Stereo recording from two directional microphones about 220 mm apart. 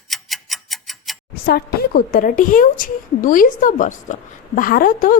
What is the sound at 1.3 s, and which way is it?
A woman's voice, 45° left (ahead or behind).